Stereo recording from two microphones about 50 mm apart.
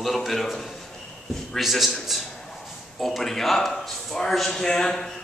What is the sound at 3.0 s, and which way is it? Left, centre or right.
A man's voice, centre.